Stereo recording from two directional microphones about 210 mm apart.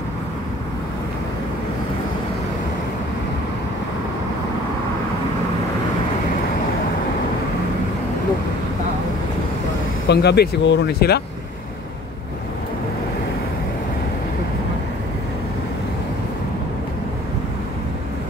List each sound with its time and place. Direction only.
10.0 s speech: 55° left (ahead or behind)